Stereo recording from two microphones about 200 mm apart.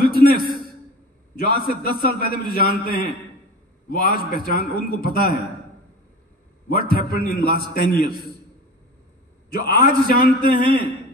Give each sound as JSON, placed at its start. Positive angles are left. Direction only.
{"t": 0.0, "sound": "a sound", "side_deg": 45}
{"t": 1.3, "sound": "a man's voice", "side_deg": 45}
{"t": 6.7, "sound": "a man's voice", "side_deg": 45}
{"t": 9.5, "sound": "a man's voice", "side_deg": 50}